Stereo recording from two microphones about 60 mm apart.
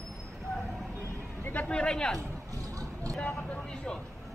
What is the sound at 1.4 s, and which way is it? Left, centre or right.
Speech, left.